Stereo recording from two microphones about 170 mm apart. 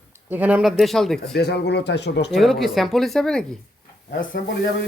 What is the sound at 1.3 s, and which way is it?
Speech, 75° left (ahead or behind).